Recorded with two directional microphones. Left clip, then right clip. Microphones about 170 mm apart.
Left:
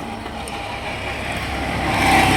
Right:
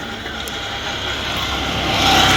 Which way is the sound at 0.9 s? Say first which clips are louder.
Right 4 dB; 20° right (ahead or behind).